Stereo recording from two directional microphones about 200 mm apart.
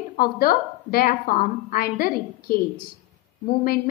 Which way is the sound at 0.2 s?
50° left (ahead or behind).